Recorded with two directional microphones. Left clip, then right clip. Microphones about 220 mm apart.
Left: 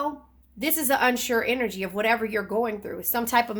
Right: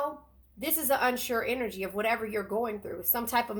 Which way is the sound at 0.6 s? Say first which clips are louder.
Left 5 dB; 40° left (ahead or behind).